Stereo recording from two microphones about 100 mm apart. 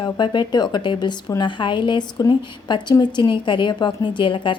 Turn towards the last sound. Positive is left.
turn(degrees=55)  # may be behind; listen again after turning